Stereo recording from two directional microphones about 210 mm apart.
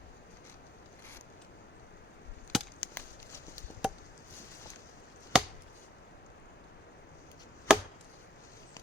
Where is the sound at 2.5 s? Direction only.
10° left (ahead or behind).